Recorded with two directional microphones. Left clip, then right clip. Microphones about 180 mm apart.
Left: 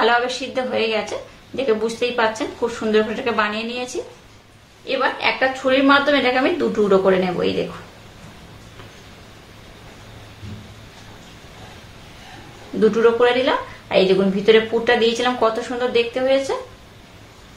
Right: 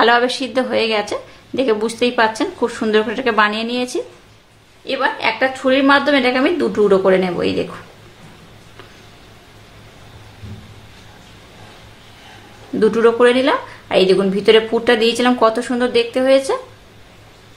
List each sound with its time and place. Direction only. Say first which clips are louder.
0.0 s a woman's voice: right 4 dB; 45° right (ahead or behind)
12.8 s a woman's voice: right 3 dB; 40° right (ahead or behind)